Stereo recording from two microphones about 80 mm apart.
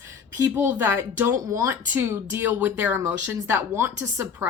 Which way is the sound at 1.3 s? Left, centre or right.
Right.